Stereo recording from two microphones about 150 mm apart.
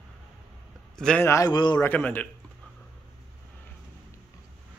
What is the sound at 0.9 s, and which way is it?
Speech, 5° left (ahead or behind).